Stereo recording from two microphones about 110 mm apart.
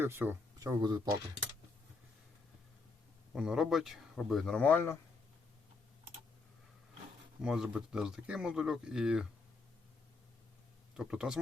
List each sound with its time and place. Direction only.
0.0 s speech: 20° right (ahead or behind); by 1.0 s 35° right (ahead or behind)
3.3 s speech: 5° right (ahead or behind); by 4.9 s 20° left (ahead or behind)
7.4 s speech: 5° right (ahead or behind)
10.9 s speech: 5° right (ahead or behind)